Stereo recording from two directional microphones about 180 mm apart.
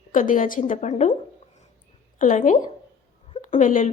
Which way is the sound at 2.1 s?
50° left (ahead or behind).